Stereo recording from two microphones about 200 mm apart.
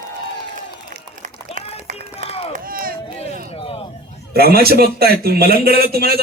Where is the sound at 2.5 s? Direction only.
45° right (ahead or behind).